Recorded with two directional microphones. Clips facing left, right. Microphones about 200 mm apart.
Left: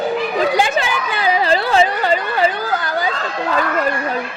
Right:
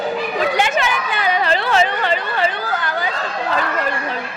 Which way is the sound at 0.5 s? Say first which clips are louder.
Left 1 dB; 35° left (ahead or behind).